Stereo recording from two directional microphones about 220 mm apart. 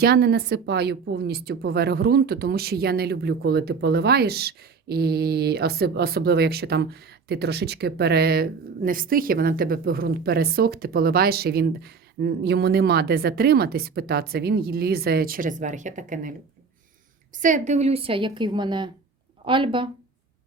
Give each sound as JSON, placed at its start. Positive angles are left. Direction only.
{"t": 0.0, "sound": "a woman's voice", "side_deg": -45}
{"t": 17.3, "sound": "a woman's voice", "side_deg": -35}